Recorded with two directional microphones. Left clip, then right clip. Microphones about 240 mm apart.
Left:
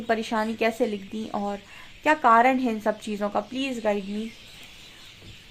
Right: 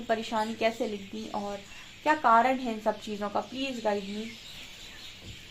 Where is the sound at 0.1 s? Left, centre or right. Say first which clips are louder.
Left 4 dB; left.